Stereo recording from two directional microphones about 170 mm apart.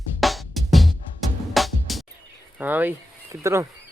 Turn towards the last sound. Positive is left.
turn(degrees=-15)  # may be behind; listen again after turning